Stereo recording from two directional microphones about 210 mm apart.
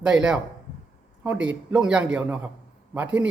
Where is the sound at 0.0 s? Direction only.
5° right (ahead or behind).